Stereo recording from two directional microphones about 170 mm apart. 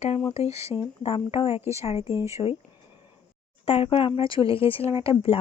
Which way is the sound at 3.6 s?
40° left (ahead or behind).